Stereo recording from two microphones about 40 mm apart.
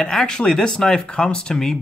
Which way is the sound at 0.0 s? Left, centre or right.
Centre.